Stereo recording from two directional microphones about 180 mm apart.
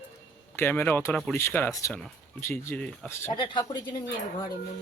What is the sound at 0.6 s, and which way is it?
Speech, 10° left (ahead or behind).